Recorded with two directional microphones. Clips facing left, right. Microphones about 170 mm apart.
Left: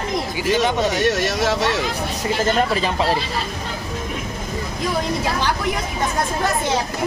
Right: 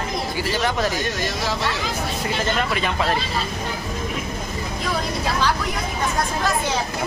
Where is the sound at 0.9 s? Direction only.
70° left (ahead or behind).